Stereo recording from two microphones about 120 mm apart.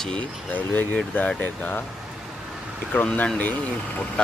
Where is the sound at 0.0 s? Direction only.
10° left (ahead or behind).